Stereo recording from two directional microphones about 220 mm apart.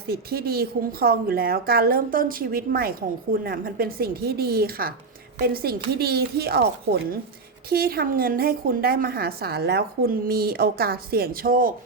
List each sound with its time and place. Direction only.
0.1 s a woman's voice: 45° right (ahead or behind)